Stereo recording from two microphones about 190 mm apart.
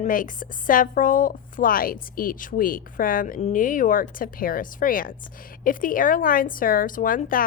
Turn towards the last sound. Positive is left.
turn(degrees=45)  # may be behind; listen again after turning